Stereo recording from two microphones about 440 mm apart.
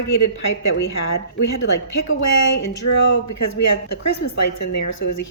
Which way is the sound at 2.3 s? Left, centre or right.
Left.